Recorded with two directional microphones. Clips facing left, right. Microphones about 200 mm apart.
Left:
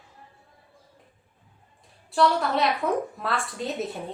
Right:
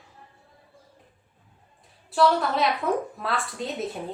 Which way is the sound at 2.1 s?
Centre (ahead or behind).